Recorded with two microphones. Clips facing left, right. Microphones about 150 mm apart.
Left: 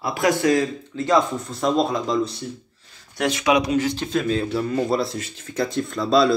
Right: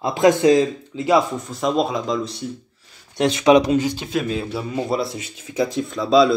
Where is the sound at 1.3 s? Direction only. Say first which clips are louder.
Even; centre (ahead or behind).